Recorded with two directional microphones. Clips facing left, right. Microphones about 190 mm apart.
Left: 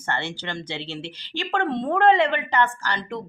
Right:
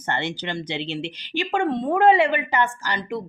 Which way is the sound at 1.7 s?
5° right (ahead or behind).